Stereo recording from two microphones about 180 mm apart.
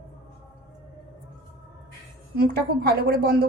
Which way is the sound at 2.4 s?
55° right (ahead or behind).